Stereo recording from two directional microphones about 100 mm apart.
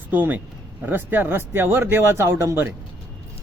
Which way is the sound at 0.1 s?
20° right (ahead or behind).